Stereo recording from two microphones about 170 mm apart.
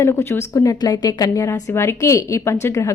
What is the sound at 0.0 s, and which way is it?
A woman's voice, 15° left (ahead or behind).